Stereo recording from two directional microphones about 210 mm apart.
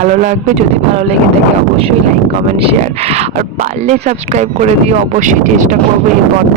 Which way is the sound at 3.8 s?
35° right (ahead or behind).